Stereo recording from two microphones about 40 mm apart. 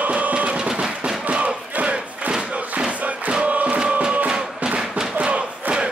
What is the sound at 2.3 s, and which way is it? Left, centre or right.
Thump, right.